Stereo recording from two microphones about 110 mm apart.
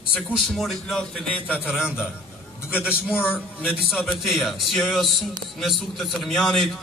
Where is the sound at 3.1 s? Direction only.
15° left (ahead or behind).